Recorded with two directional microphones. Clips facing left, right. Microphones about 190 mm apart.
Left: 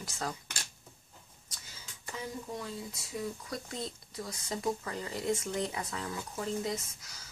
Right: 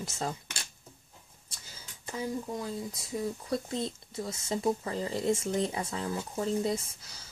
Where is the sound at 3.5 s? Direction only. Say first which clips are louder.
Right 7 dB; 25° right (ahead or behind).